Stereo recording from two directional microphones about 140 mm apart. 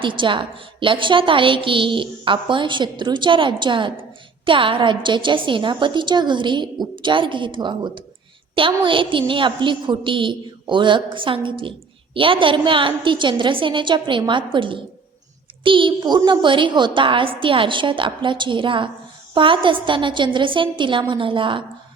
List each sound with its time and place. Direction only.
0.0 s a woman's voice: 35° right (ahead or behind)